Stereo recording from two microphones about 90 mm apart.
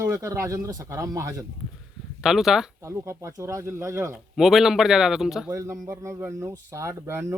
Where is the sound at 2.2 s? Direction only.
5° right (ahead or behind).